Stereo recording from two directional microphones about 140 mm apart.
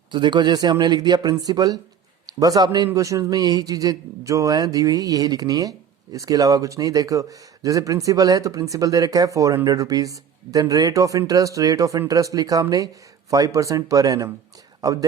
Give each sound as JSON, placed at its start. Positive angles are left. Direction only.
{"t": 0.1, "sound": "speech", "side_deg": -35}